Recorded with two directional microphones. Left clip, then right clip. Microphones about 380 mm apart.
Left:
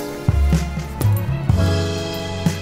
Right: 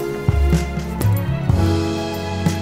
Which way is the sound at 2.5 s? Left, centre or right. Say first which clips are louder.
Right 3 dB; centre.